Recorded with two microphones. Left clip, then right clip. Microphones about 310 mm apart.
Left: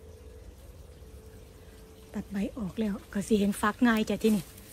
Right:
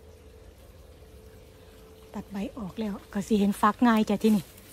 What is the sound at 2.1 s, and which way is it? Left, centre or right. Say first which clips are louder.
Speech: left 1 dB; centre.